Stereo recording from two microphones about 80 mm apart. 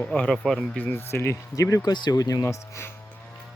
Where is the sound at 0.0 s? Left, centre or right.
Centre.